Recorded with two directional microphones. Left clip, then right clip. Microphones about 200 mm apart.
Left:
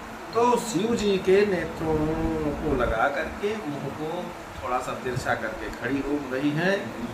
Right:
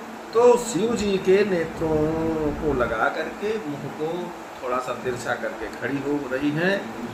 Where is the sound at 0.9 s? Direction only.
15° left (ahead or behind).